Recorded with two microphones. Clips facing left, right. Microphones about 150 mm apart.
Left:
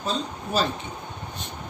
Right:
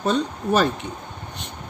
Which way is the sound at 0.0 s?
70° right (ahead or behind).